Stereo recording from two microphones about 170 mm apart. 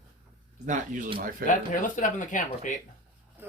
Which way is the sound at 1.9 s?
50° left (ahead or behind).